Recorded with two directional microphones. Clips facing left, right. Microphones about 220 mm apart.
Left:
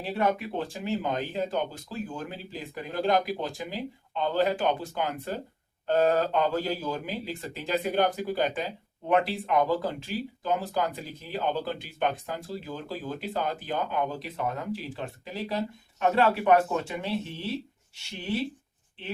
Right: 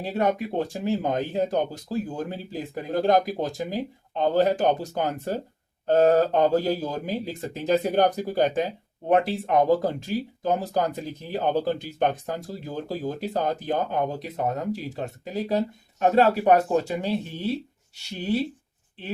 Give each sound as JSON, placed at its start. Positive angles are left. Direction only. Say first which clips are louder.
{"t": 0.0, "sound": "speech", "louder": "right 3 dB", "side_deg": -40}